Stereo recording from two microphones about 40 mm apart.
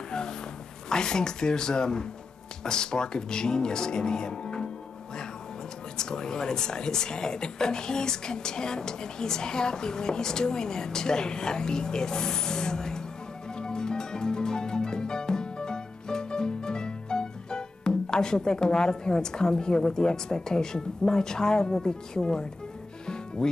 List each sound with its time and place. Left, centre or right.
0.1 s a sound: centre
0.8 s speech: centre
5.9 s speech: centre
13.6 s music: left